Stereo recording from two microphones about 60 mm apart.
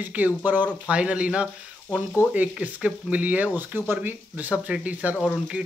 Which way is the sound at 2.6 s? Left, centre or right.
Right.